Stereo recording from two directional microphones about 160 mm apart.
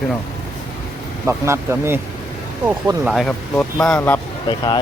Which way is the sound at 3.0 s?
Centre (ahead or behind).